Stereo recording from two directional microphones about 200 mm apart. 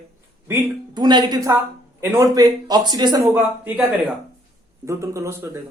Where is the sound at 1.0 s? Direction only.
20° right (ahead or behind).